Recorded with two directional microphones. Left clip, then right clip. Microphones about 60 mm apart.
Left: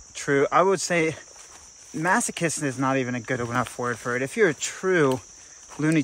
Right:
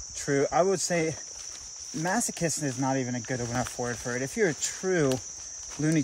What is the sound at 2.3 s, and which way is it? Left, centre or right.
Speech, centre.